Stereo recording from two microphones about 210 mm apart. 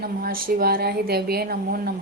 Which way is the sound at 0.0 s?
45° right (ahead or behind).